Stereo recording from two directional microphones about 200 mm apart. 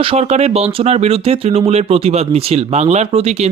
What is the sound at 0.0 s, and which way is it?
Speech, 30° right (ahead or behind).